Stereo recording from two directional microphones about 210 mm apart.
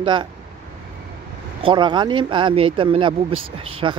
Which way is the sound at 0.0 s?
20° right (ahead or behind).